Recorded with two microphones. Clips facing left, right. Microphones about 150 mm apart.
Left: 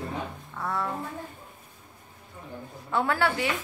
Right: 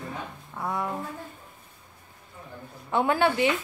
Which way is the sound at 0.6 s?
15° right (ahead or behind).